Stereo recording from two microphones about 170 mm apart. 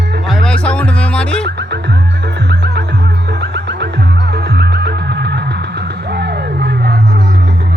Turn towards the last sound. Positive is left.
turn(degrees=-80)